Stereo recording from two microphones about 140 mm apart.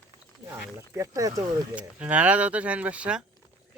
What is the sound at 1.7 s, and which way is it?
Speech, 10° right (ahead or behind).